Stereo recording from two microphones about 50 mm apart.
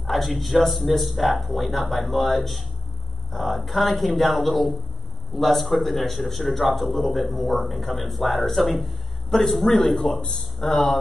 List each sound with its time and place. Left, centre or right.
0.0 s speech: centre
10.2 s speech: centre